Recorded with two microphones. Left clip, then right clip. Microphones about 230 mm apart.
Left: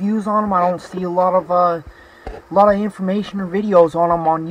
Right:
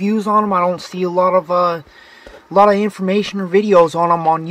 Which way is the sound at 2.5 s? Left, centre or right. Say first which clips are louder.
Right 2 dB; right.